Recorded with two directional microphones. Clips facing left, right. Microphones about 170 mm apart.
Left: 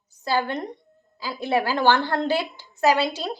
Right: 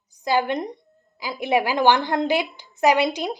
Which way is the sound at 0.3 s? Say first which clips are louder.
Right 3 dB; 15° right (ahead or behind).